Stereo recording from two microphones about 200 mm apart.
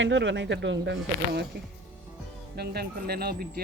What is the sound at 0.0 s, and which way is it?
Speech, 65° right (ahead or behind).